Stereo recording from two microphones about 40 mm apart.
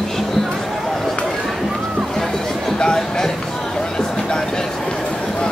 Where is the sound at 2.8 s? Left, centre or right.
Centre.